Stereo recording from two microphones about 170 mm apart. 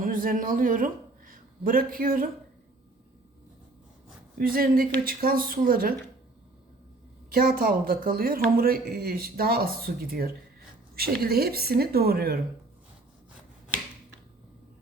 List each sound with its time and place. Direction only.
0.0 s speech: 55° right (ahead or behind)
4.4 s speech: 60° right (ahead or behind)
7.3 s speech: 60° right (ahead or behind)